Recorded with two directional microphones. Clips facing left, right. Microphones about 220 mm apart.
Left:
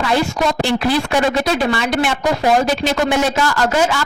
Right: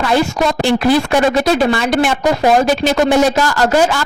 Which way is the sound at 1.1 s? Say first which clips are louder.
Right 4 dB; 45° right (ahead or behind).